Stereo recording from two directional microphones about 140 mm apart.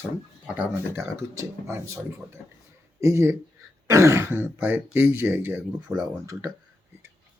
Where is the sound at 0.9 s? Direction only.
20° right (ahead or behind).